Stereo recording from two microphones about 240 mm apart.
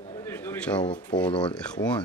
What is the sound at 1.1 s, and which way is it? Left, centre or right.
Speech, centre.